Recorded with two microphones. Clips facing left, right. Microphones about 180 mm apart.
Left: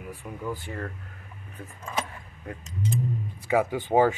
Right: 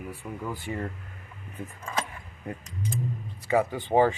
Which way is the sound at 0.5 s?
15° right (ahead or behind).